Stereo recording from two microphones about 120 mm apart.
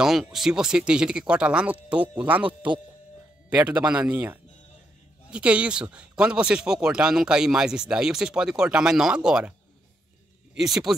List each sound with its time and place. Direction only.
0.0 s speech: 5° right (ahead or behind)
2.4 s speech: 40° right (ahead or behind)
3.4 s speech: 10° right (ahead or behind)
10.6 s speech: centre (ahead or behind)